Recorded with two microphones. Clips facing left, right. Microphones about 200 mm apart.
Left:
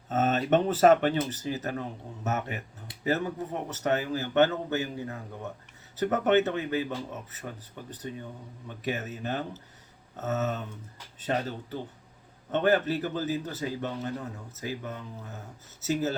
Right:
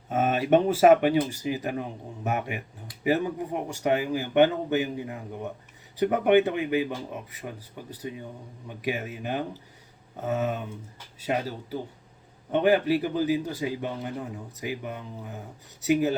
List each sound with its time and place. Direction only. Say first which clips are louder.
0.1 s a man's voice: right 3 dB; 10° right (ahead or behind)